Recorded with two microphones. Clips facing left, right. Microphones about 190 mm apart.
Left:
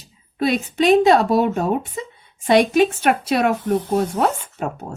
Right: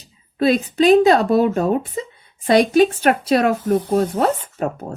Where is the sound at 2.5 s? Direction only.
35° right (ahead or behind).